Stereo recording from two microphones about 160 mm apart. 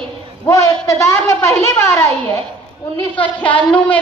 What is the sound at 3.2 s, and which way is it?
Speech, 10° left (ahead or behind).